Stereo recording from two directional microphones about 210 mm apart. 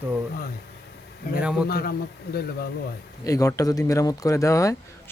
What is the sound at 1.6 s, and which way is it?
Speech, 45° left (ahead or behind).